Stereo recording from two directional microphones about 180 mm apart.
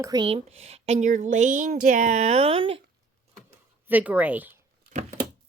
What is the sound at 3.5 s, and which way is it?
Computer keyboard, 10° right (ahead or behind).